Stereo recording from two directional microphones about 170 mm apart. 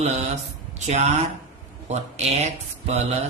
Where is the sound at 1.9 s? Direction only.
40° right (ahead or behind).